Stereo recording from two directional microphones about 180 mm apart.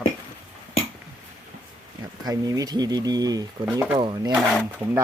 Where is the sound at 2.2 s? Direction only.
20° right (ahead or behind).